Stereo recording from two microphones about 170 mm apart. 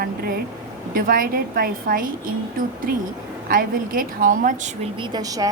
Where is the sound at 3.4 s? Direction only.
55° right (ahead or behind).